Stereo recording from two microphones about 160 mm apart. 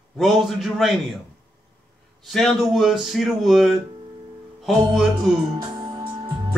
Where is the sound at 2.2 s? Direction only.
Centre (ahead or behind).